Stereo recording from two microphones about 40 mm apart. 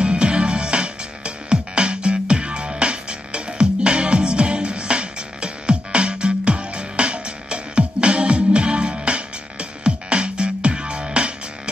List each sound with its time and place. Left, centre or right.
0.0 s music: right